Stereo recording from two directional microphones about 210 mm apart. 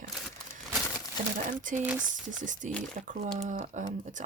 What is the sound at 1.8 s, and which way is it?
Speech, 5° right (ahead or behind).